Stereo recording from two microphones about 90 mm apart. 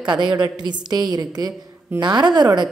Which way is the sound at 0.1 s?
55° right (ahead or behind).